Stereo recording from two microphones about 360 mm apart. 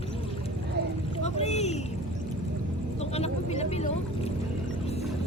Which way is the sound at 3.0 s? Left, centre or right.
Centre.